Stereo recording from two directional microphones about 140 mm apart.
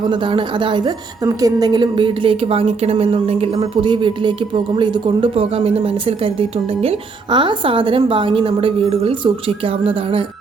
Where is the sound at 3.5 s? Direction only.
30° right (ahead or behind).